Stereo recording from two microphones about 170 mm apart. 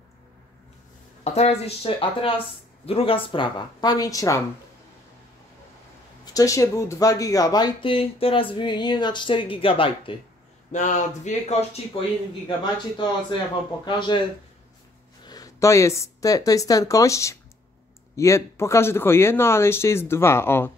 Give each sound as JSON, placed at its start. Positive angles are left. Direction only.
{"t": 1.2, "sound": "speech", "side_deg": 40}
{"t": 6.2, "sound": "speech", "side_deg": 20}
{"t": 10.7, "sound": "speech", "side_deg": 45}
{"t": 15.2, "sound": "speech", "side_deg": 20}